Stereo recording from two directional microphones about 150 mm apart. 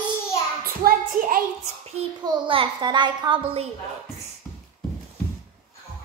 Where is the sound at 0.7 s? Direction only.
70° right (ahead or behind).